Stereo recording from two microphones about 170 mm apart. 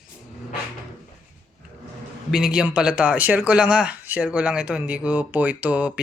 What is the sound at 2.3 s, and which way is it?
Speech, 5° right (ahead or behind).